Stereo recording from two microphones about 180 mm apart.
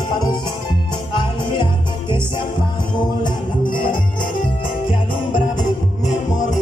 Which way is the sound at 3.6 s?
50° left (ahead or behind).